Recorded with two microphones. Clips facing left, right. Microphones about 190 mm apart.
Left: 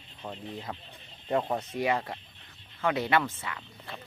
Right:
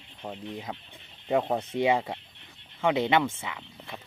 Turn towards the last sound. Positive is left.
turn(degrees=-20)  # may be behind; listen again after turning